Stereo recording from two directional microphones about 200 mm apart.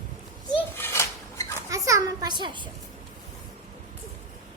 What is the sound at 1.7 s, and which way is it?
Children playing, 15° right (ahead or behind).